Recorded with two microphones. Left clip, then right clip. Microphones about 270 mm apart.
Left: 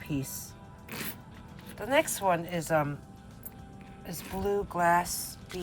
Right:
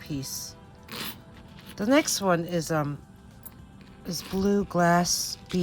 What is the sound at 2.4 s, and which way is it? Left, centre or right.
Speech, centre.